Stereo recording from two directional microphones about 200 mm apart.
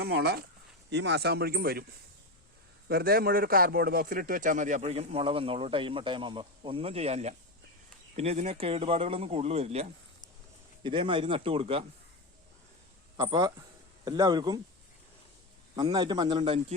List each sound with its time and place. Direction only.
0.0 s speech: 55° right (ahead or behind)
2.9 s a man's voice: 50° right (ahead or behind); by 11.9 s 30° right (ahead or behind)
13.1 s a man's voice: 20° right (ahead or behind)
15.7 s a man's voice: 20° right (ahead or behind)